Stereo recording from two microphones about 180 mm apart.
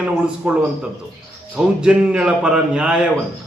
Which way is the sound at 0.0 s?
5° right (ahead or behind).